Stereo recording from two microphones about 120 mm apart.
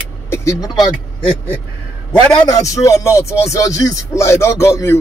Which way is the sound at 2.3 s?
30° left (ahead or behind).